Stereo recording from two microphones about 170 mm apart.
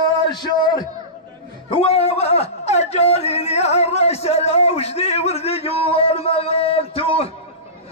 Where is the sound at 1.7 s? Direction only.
35° left (ahead or behind).